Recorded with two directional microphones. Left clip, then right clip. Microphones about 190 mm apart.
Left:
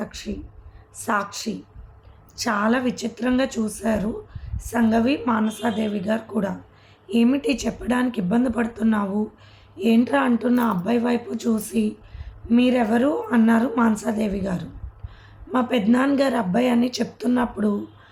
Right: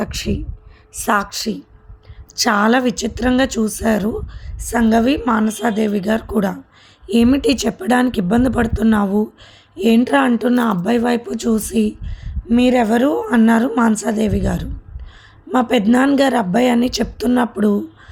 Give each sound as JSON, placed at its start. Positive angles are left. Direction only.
{"t": 0.0, "sound": "a woman's voice", "side_deg": -50}